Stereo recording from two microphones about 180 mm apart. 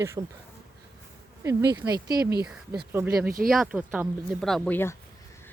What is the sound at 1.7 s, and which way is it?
Speech, 25° right (ahead or behind).